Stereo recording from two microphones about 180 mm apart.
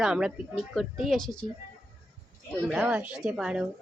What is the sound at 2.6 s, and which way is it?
A woman's voice, centre (ahead or behind).